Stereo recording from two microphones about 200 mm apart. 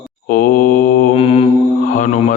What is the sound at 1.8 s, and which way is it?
Speech, 40° left (ahead or behind).